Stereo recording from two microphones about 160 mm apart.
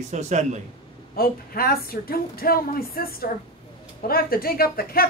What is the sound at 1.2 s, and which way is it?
Speech, 65° left (ahead or behind).